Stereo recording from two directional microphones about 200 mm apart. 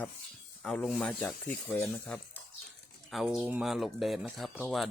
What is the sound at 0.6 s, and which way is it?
Speech, 5° left (ahead or behind).